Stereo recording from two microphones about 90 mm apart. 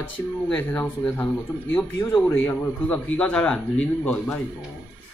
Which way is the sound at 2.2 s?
20° left (ahead or behind).